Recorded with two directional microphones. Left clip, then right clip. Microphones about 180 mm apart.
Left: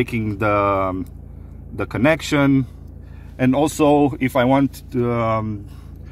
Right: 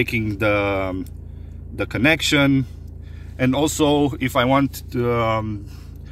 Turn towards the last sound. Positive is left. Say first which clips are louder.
# even
turn(degrees=10)  # may be behind; listen again after turning